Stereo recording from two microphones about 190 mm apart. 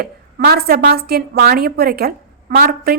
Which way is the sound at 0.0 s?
55° right (ahead or behind).